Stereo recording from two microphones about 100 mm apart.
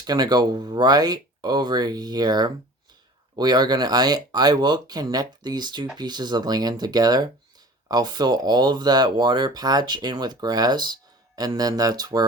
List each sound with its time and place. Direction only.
0.0 s speech: 45° right (ahead or behind)